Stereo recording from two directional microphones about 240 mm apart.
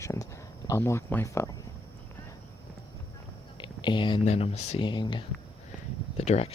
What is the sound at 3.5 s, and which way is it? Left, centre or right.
Speech, centre.